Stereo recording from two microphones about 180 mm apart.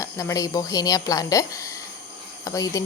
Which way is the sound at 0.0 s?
15° left (ahead or behind).